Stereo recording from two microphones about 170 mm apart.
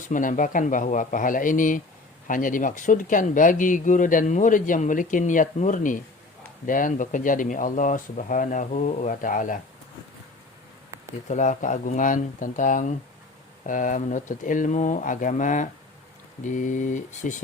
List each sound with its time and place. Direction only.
0.1 s speech: 50° left (ahead or behind)
11.3 s speech: 45° left (ahead or behind)